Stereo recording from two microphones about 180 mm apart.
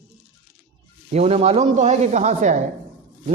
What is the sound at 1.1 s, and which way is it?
A man's voice, 35° right (ahead or behind).